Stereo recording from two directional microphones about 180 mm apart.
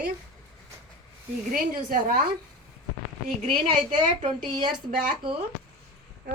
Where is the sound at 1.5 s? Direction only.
50° right (ahead or behind).